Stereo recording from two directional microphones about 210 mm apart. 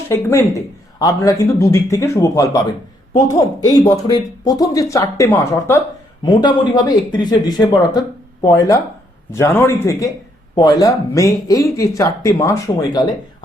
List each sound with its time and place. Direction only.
0.1 s speech: 10° left (ahead or behind)